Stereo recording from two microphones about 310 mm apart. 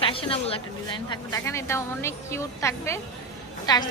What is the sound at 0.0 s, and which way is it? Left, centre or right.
A woman's voice, centre.